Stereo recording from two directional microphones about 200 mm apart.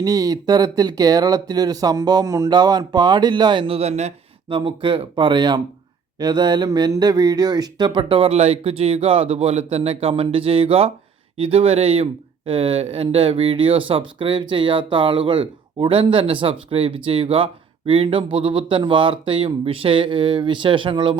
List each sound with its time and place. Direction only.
0.0 s speech: 15° right (ahead or behind)